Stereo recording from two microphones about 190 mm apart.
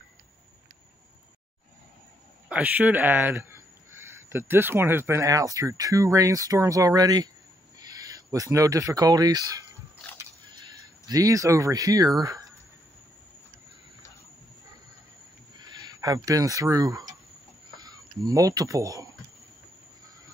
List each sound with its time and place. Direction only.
2.5 s speech: 10° right (ahead or behind)
10.1 s a sound: 20° right (ahead or behind)
15.5 s speech: 20° right (ahead or behind)